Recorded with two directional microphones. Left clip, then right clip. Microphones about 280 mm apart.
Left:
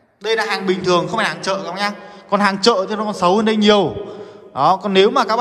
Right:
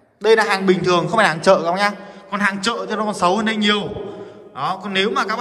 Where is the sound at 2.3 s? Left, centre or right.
Centre.